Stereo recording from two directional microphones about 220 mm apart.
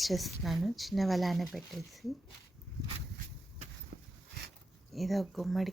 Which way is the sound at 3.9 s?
40° right (ahead or behind).